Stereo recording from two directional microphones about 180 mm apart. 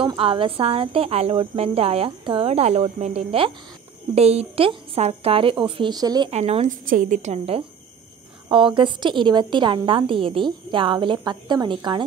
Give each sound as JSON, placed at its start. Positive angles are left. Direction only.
{"t": 0.0, "sound": "speech", "side_deg": -30}
{"t": 6.3, "sound": "a woman's voice", "side_deg": -40}